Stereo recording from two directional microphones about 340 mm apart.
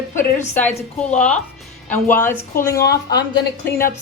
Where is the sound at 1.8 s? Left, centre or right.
Centre.